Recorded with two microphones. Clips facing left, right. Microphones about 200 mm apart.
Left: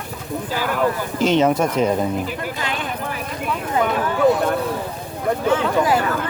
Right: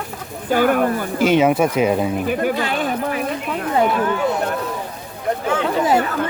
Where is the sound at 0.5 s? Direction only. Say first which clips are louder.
Right 10 dB; 55° right (ahead or behind).